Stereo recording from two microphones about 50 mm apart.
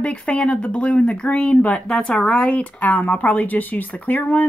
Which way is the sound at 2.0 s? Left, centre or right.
Centre.